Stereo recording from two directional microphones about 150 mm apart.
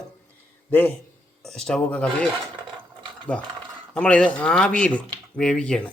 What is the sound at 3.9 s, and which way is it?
Speech, 5° left (ahead or behind).